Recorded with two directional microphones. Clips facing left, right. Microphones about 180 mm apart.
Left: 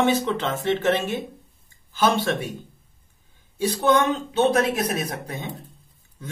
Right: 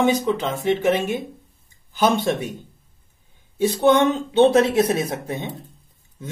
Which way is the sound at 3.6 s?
25° right (ahead or behind).